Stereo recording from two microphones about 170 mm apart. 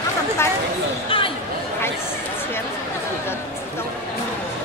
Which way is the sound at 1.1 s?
30° left (ahead or behind).